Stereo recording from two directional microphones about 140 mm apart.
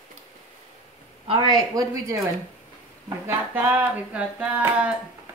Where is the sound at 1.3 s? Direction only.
30° right (ahead or behind).